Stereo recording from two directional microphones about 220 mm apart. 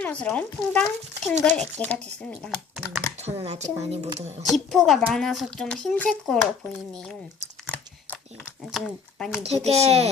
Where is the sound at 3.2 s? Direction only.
30° right (ahead or behind).